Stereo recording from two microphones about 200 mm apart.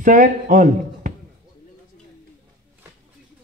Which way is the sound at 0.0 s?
40° right (ahead or behind).